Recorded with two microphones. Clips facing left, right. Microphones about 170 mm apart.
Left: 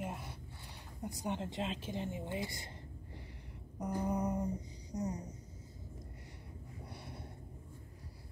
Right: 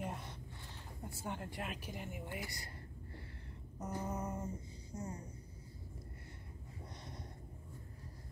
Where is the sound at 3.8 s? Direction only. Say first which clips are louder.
Left 6 dB; 15° left (ahead or behind).